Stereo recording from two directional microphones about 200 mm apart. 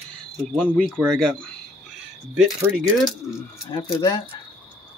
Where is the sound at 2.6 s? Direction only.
5° right (ahead or behind).